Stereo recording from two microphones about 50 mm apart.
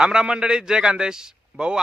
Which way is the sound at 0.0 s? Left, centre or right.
Centre.